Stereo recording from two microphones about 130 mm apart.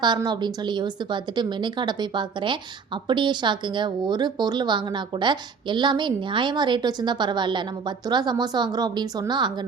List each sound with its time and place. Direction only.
0.0 s a woman's voice: 35° right (ahead or behind)